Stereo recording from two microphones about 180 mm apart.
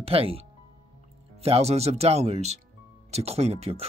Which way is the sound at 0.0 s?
30° right (ahead or behind).